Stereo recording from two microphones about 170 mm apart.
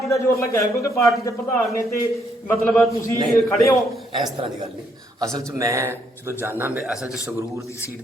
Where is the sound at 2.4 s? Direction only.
5° left (ahead or behind).